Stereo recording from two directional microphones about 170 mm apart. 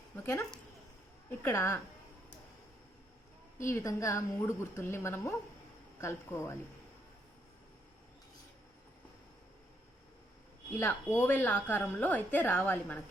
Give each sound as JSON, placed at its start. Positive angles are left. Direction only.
{"t": 0.2, "sound": "a woman's voice", "side_deg": 15}
{"t": 3.6, "sound": "a woman's voice", "side_deg": 15}
{"t": 10.8, "sound": "a woman's voice", "side_deg": 15}